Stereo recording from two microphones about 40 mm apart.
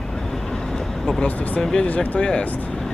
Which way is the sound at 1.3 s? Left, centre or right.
Left.